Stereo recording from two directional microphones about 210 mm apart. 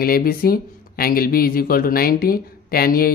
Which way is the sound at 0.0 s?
45° left (ahead or behind).